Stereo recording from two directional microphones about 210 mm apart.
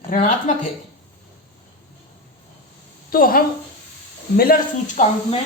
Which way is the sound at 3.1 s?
45° left (ahead or behind).